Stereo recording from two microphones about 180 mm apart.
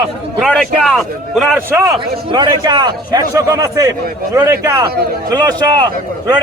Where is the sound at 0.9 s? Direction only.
Centre (ahead or behind).